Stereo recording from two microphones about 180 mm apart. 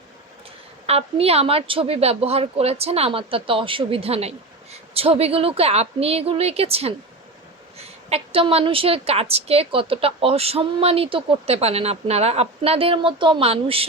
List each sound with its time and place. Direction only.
0.9 s a woman's voice: 35° right (ahead or behind)
8.1 s a woman's voice: 30° right (ahead or behind)